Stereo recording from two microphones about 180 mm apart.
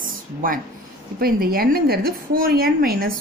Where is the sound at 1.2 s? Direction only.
55° right (ahead or behind).